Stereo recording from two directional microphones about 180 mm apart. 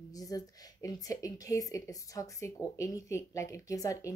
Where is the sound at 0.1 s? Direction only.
20° left (ahead or behind).